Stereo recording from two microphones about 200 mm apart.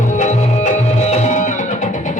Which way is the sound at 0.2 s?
35° left (ahead or behind).